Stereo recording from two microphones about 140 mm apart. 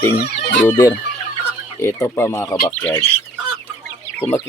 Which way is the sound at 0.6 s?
25° left (ahead or behind).